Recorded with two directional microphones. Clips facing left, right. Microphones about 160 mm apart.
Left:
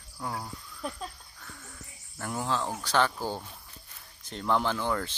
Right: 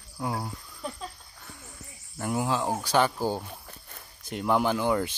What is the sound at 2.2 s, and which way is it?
Speech, 10° right (ahead or behind).